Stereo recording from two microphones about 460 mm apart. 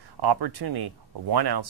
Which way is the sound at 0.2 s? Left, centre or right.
Right.